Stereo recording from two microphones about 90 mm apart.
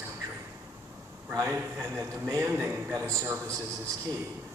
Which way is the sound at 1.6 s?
20° right (ahead or behind).